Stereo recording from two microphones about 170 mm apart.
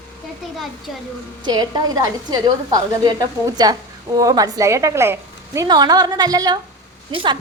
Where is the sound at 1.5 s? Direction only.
25° right (ahead or behind).